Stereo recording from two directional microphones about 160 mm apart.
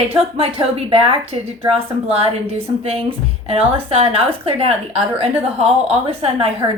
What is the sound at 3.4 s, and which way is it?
A woman's voice, 40° right (ahead or behind).